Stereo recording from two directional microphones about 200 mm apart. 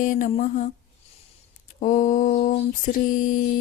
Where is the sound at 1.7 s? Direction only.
40° left (ahead or behind).